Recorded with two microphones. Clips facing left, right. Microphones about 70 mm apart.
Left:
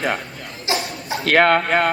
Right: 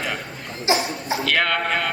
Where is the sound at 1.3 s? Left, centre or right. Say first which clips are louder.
Left 8 dB; left.